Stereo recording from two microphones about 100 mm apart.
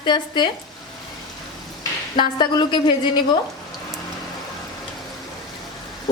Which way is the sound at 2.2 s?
50° left (ahead or behind).